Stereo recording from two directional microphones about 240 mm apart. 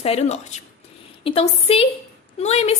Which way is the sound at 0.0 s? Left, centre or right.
Left.